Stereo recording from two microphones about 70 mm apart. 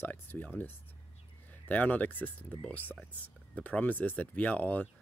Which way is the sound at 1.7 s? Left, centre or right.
Left.